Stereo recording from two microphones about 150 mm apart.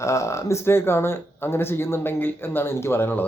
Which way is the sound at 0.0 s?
20° left (ahead or behind).